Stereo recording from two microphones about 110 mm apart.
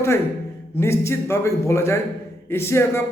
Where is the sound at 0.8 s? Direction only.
25° left (ahead or behind).